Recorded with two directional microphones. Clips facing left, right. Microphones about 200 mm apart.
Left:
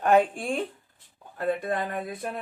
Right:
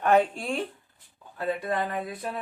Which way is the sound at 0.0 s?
50° left (ahead or behind).